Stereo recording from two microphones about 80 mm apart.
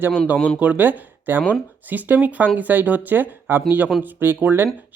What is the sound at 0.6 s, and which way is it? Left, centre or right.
Speech, right.